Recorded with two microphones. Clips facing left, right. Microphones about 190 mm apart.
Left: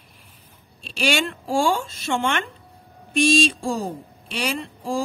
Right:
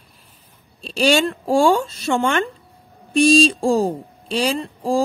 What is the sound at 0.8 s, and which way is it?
Speech, 35° right (ahead or behind).